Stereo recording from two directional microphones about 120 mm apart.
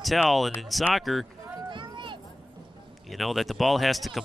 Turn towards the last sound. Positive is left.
turn(degrees=0)  # may be behind; listen again after turning